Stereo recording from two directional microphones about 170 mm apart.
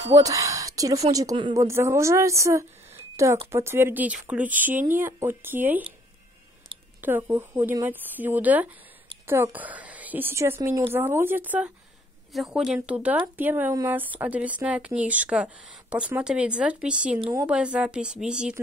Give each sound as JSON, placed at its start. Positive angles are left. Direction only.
{"t": 0.1, "sound": "a woman's voice", "side_deg": -20}
{"t": 7.0, "sound": "a woman's voice", "side_deg": -10}
{"t": 17.2, "sound": "speech", "side_deg": -20}
{"t": 17.5, "sound": "speech", "side_deg": -5}